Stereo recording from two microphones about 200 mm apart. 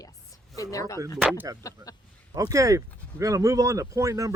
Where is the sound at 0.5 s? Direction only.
15° left (ahead or behind).